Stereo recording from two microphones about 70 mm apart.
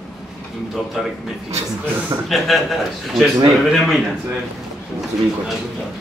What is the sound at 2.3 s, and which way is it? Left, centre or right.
A man's voice, centre.